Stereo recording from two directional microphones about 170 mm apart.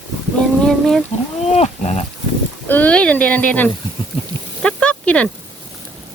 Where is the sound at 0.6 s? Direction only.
Centre (ahead or behind).